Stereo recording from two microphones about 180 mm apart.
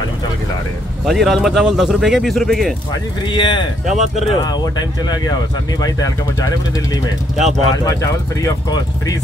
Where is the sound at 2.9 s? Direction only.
25° left (ahead or behind).